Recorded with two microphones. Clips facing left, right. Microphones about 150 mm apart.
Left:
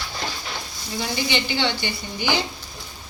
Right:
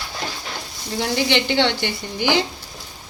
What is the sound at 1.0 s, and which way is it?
A woman's voice, 75° right (ahead or behind).